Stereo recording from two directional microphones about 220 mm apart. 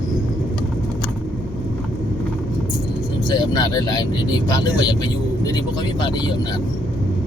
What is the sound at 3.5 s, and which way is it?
Speech, 15° left (ahead or behind).